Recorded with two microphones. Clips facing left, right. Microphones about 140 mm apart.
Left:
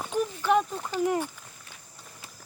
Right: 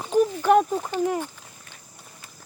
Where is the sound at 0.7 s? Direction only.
25° right (ahead or behind).